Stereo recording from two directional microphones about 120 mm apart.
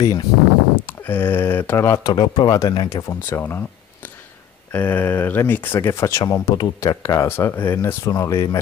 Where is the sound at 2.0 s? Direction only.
35° left (ahead or behind); by 3.6 s 15° left (ahead or behind).